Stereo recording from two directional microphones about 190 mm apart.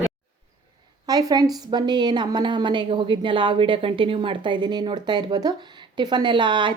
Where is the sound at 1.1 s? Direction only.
20° right (ahead or behind).